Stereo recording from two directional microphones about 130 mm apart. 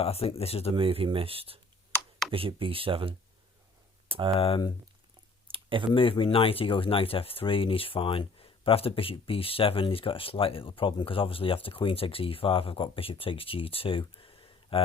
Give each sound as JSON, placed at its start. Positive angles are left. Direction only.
{"t": 0.0, "sound": "speech", "side_deg": 50}
{"t": 0.8, "sound": "speech", "side_deg": -45}
{"t": 4.4, "sound": "speech", "side_deg": 45}
{"t": 5.5, "sound": "a sound", "side_deg": -40}
{"t": 5.9, "sound": "speech", "side_deg": 40}
{"t": 14.2, "sound": "a sound", "side_deg": 45}